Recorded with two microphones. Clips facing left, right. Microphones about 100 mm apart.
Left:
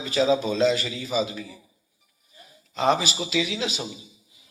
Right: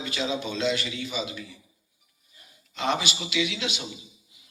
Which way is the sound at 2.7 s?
35° left (ahead or behind).